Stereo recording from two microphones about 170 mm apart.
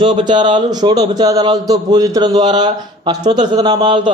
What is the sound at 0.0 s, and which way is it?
Speech, 25° right (ahead or behind).